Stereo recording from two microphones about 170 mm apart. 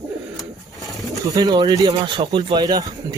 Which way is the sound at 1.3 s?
20° right (ahead or behind).